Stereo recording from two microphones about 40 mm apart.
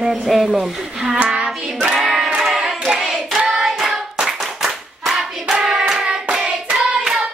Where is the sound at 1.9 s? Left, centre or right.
Centre.